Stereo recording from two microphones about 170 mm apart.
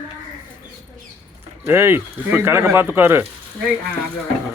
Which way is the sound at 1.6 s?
15° right (ahead or behind).